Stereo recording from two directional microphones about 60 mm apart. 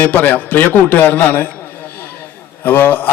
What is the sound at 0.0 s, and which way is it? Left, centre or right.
A man's voice, left.